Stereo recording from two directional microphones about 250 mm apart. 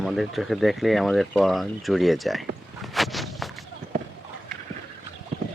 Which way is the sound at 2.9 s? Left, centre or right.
Centre.